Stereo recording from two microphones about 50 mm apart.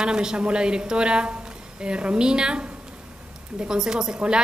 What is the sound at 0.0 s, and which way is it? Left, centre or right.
A woman's voice, centre.